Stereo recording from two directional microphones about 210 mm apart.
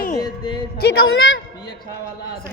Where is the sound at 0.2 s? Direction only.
20° left (ahead or behind).